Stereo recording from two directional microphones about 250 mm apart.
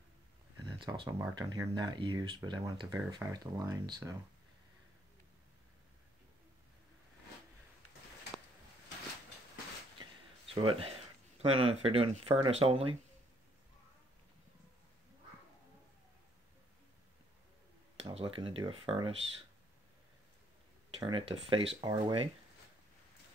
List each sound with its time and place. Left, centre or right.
1.0 s speech: centre
10.5 s speech: right
17.9 s speech: right
21.0 s speech: right